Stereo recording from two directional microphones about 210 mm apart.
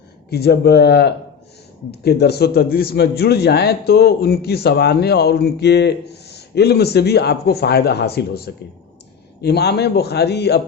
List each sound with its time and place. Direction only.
0.3 s a man's voice: 50° left (ahead or behind)